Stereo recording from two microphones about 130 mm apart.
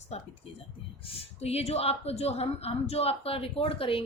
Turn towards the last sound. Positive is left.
turn(degrees=45)  # may be behind; listen again after turning